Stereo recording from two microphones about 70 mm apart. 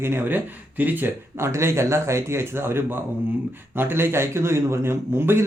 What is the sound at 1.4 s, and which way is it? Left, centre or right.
A man's voice, right.